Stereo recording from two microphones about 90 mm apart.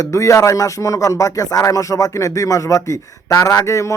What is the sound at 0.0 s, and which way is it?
Music, 35° left (ahead or behind).